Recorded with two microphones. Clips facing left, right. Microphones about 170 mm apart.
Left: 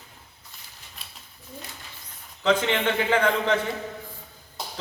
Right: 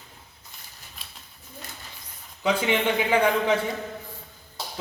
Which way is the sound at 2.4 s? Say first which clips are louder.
Left 1 dB; 10° right (ahead or behind).